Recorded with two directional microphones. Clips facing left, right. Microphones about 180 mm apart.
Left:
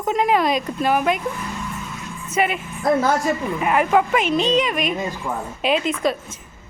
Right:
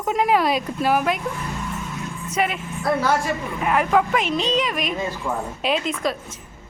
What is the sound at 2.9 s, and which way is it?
Speech, 45° left (ahead or behind).